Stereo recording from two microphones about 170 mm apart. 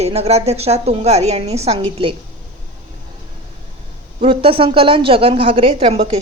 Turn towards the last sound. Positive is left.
turn(degrees=-35)  # may be behind; listen again after turning